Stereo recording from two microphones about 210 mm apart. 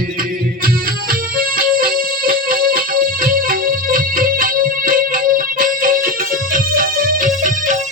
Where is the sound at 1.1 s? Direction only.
45° right (ahead or behind).